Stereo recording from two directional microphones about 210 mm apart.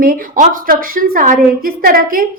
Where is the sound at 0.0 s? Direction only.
40° right (ahead or behind).